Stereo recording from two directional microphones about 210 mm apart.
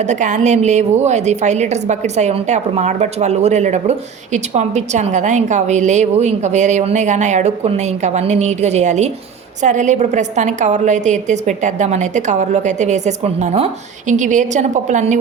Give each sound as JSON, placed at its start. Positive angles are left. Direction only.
{"t": 0.0, "sound": "a woman's voice", "side_deg": -35}